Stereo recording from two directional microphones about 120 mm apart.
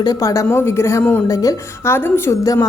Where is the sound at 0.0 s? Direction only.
30° left (ahead or behind).